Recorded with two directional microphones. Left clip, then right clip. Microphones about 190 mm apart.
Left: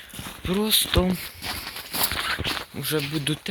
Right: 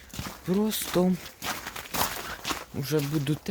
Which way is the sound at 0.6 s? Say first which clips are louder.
Left 8 dB; 20° right (ahead or behind).